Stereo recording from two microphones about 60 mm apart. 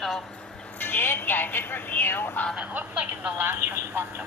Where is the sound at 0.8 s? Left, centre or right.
Left.